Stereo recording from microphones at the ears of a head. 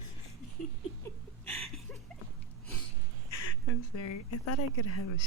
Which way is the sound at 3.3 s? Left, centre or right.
Left.